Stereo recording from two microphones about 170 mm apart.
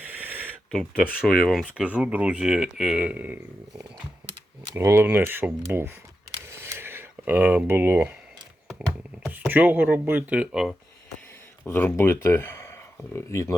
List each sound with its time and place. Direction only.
1.2 s speech: centre (ahead or behind)
4.7 s speech: 15° right (ahead or behind)
6.4 s a sound: 15° right (ahead or behind)
9.2 s speech: 5° right (ahead or behind)
11.6 s speech: 10° left (ahead or behind)